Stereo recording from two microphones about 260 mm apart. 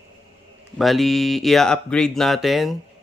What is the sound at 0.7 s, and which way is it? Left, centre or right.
Speech, centre.